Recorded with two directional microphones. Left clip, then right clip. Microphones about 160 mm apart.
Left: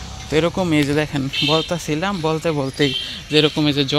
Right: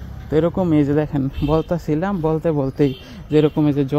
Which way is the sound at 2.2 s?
10° right (ahead or behind).